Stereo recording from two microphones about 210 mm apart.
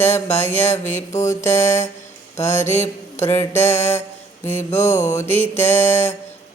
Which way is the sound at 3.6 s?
30° left (ahead or behind).